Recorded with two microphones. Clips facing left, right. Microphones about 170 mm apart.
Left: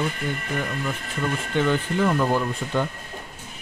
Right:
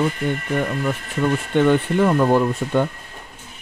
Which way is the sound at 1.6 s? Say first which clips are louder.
Right 5 dB; 60° right (ahead or behind).